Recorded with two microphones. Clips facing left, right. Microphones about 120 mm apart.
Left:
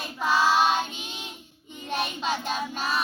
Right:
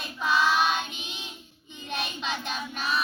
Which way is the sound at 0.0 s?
35° left (ahead or behind).